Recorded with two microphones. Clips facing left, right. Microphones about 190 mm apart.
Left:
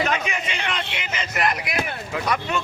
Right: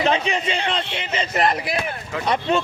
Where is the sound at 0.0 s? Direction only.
30° right (ahead or behind).